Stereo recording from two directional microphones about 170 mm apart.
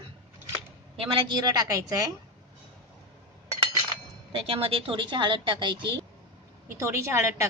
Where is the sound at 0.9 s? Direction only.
30° right (ahead or behind).